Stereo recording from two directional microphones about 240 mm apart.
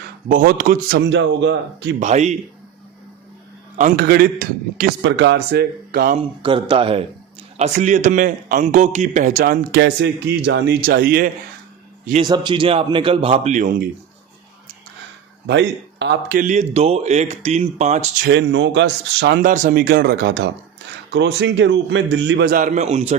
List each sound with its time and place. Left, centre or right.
0.3 s a man's voice: right
2.0 s speech: right
3.8 s a man's voice: right
6.4 s a man's voice: right
12.2 s speech: centre; by 13.9 s right
15.4 s speech: right
18.3 s speech: right